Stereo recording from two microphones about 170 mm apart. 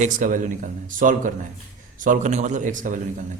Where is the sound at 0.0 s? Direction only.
50° right (ahead or behind).